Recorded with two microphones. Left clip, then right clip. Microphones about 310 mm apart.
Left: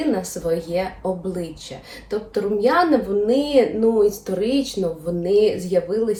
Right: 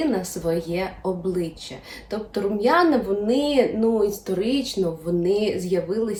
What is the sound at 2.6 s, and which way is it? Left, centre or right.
Speech, centre.